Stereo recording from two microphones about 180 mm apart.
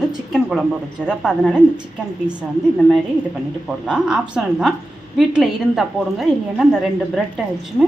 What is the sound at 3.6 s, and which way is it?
A woman's voice, 5° right (ahead or behind).